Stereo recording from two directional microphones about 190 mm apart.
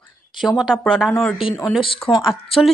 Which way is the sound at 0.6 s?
Centre (ahead or behind).